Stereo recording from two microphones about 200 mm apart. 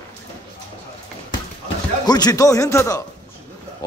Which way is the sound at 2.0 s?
20° left (ahead or behind).